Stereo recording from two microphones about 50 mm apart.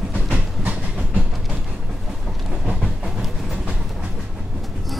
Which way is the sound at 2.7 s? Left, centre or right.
Centre.